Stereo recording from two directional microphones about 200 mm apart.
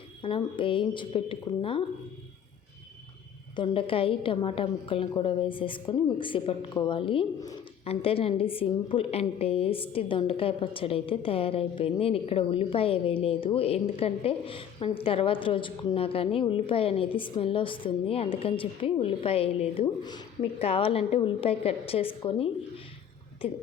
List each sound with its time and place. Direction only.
0.2 s a woman's voice: 25° left (ahead or behind)
3.5 s a woman's voice: 25° left (ahead or behind)